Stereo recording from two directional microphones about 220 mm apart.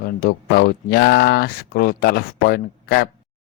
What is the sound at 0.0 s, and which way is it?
Speech, 40° left (ahead or behind).